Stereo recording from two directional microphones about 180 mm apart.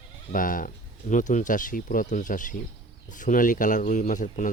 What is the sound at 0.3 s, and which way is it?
Speech, 50° left (ahead or behind).